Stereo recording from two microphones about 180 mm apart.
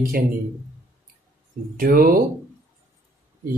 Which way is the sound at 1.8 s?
55° right (ahead or behind).